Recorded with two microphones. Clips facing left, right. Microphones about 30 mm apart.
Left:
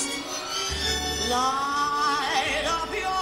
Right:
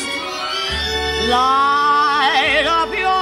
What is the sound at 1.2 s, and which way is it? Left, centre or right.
Music, right.